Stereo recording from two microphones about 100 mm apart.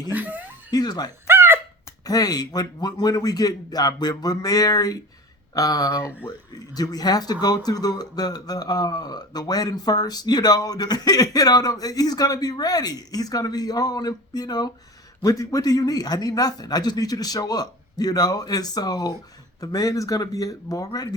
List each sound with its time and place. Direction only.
0.1 s speech: 15° right (ahead or behind)
0.7 s speech: 40° left (ahead or behind)
1.3 s thunk: 25° right (ahead or behind)
2.0 s speech: 40° left (ahead or behind)